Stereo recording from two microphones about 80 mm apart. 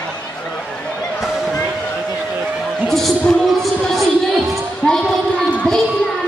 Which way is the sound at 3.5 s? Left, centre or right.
Centre.